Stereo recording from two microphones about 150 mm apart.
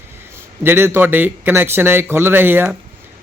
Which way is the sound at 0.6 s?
15° right (ahead or behind).